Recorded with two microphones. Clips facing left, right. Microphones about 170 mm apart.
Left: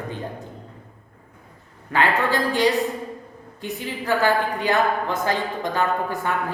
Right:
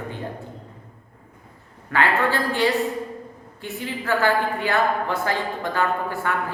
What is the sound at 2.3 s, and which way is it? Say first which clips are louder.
A woman's voice: left 1 dB; 15° left (ahead or behind).